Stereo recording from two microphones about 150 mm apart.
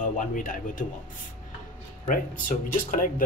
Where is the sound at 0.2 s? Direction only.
65° left (ahead or behind).